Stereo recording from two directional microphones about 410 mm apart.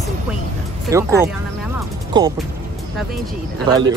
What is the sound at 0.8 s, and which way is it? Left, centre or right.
Speech, centre.